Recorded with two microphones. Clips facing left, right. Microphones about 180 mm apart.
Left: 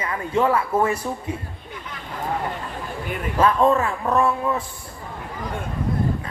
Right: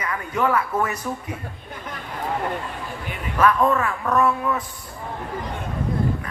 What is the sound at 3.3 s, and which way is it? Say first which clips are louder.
A man's voice: left 1 dB; 25° left (ahead or behind).